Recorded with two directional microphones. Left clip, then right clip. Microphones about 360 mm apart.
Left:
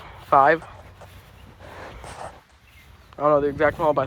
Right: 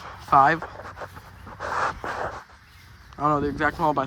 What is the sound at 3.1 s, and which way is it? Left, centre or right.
Speech, centre.